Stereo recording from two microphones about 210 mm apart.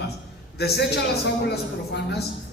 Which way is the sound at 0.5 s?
50° left (ahead or behind).